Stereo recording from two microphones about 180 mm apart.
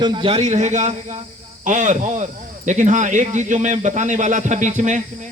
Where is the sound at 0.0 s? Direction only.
25° right (ahead or behind); by 5.3 s 40° right (ahead or behind).